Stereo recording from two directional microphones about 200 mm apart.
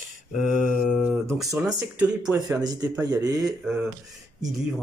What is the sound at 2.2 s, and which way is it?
Speech, 20° right (ahead or behind).